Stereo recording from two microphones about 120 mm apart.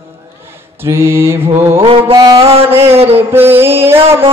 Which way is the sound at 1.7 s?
50° right (ahead or behind).